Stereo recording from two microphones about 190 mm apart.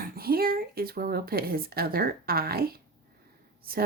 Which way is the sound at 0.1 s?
50° right (ahead or behind).